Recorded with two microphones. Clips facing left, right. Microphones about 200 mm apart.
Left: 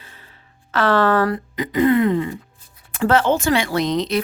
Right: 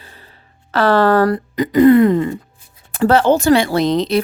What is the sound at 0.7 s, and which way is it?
Speech, 35° right (ahead or behind).